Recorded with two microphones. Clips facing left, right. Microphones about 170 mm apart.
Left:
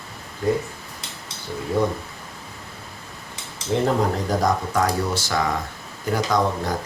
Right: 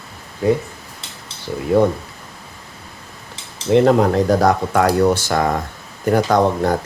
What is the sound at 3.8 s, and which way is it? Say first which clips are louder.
Speech: right 8 dB; 70° right (ahead or behind).